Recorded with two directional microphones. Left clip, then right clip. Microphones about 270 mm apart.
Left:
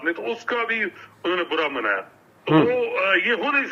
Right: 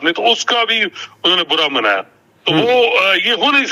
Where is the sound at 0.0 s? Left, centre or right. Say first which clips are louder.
Right 12 dB; right.